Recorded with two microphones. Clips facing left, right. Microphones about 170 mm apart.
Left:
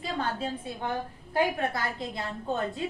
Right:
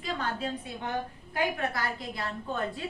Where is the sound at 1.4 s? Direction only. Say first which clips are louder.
Left 3 dB; 25° left (ahead or behind).